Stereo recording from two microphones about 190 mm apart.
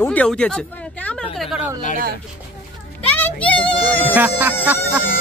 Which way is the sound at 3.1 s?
10° left (ahead or behind).